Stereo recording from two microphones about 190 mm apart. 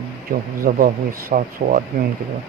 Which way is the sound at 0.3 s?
50° right (ahead or behind).